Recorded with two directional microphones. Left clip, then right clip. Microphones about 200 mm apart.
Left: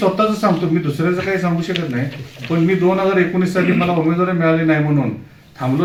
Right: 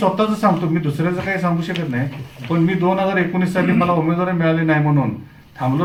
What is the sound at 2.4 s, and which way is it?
Speech, 50° right (ahead or behind).